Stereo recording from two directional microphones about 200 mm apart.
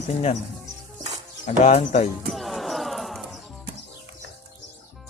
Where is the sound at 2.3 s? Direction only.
Centre (ahead or behind).